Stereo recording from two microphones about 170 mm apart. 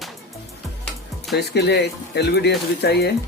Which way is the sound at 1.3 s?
75° left (ahead or behind).